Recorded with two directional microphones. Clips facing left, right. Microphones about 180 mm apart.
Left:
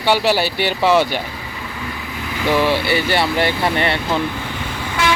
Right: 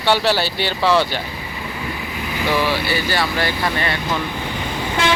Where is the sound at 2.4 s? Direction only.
20° left (ahead or behind).